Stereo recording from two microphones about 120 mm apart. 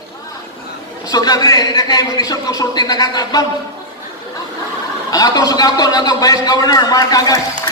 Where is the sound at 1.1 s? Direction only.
35° left (ahead or behind).